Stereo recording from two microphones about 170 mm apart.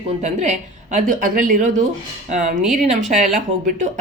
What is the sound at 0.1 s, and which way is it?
Speech, 40° right (ahead or behind).